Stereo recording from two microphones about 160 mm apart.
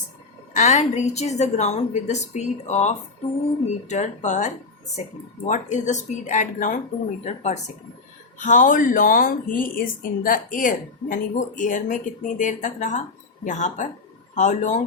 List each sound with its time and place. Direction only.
0.5 s a woman's voice: 50° left (ahead or behind)